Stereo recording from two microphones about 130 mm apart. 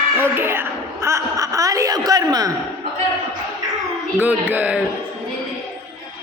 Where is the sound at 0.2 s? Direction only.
15° right (ahead or behind).